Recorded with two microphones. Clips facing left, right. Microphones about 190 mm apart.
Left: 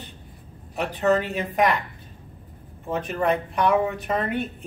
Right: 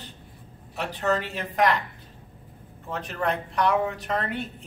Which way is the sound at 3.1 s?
15° left (ahead or behind).